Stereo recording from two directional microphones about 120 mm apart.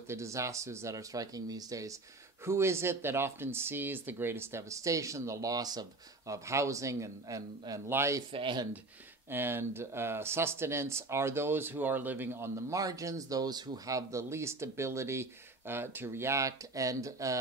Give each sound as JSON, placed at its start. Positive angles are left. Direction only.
{"t": 0.1, "sound": "speech", "side_deg": -25}
{"t": 8.3, "sound": "speech", "side_deg": -45}
{"t": 9.3, "sound": "speech", "side_deg": -20}